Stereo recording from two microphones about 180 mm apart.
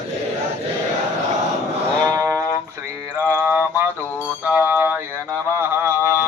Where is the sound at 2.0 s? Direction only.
15° right (ahead or behind).